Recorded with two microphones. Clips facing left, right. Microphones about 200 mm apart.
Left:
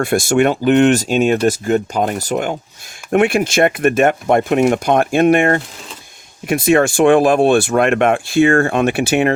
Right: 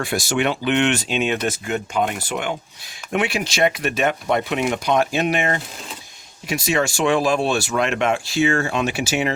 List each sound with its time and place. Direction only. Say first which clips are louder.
0.0 s speech: left 8 dB; 50° left (ahead or behind)
3.1 s speech: left 9 dB; 50° left (ahead or behind)